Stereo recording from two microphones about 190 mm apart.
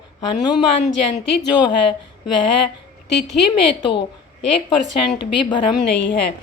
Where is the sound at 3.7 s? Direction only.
25° left (ahead or behind).